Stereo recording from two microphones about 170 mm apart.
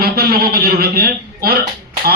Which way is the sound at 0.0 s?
60° right (ahead or behind).